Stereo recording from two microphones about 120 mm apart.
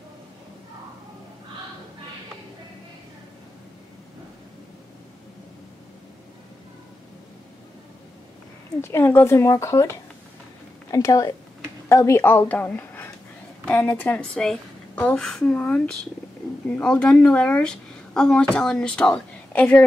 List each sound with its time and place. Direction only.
8.8 s a woman's voice: 20° left (ahead or behind)